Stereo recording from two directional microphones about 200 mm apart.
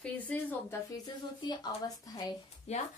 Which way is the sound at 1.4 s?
20° left (ahead or behind).